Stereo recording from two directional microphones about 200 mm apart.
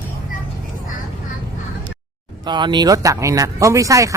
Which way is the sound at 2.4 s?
20° right (ahead or behind).